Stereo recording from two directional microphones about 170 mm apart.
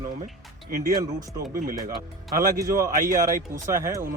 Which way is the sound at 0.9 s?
20° right (ahead or behind).